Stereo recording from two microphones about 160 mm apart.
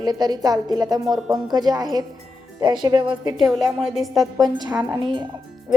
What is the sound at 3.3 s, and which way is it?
Speech, centre (ahead or behind).